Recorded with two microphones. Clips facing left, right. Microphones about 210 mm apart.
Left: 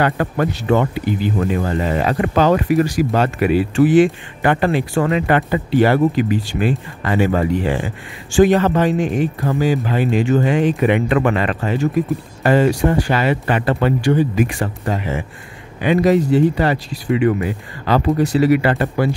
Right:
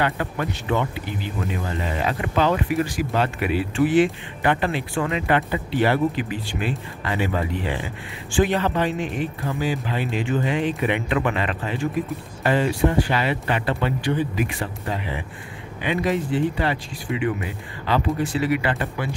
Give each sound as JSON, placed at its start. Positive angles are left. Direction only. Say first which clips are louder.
{"t": 0.0, "sound": "speech", "louder": "left 7 dB", "side_deg": 45}